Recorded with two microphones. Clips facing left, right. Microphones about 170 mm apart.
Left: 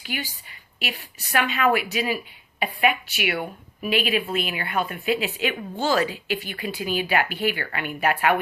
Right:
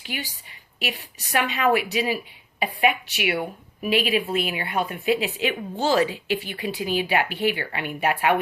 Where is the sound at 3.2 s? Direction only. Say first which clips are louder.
Right 1 dB; 25° right (ahead or behind).